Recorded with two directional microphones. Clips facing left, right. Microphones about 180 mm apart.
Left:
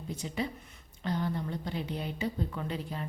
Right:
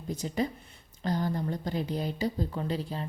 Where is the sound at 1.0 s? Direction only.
40° right (ahead or behind).